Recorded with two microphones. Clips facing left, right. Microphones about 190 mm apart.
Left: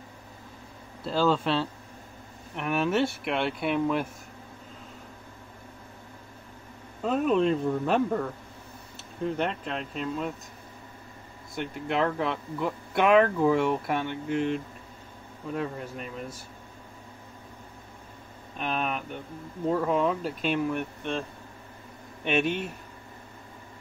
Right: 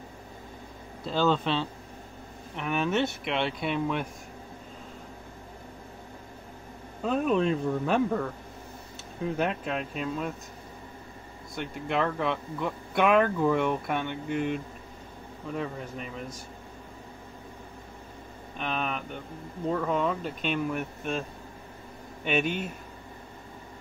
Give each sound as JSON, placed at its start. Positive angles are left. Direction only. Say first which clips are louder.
{"t": 1.0, "sound": "speech", "louder": "left 1 dB", "side_deg": 5}
{"t": 7.0, "sound": "speech", "louder": "left 1 dB", "side_deg": 0}
{"t": 9.4, "sound": "speech", "louder": "right 1 dB", "side_deg": -5}
{"t": 11.5, "sound": "speech", "louder": "left 1 dB", "side_deg": 0}
{"t": 18.6, "sound": "speech", "louder": "left 2 dB", "side_deg": 0}
{"t": 22.2, "sound": "speech", "louder": "left 1 dB", "side_deg": 0}